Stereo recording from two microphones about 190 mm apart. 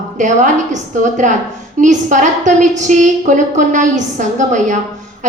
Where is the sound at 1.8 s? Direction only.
40° right (ahead or behind).